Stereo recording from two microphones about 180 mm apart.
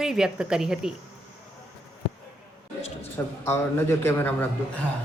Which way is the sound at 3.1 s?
15° left (ahead or behind).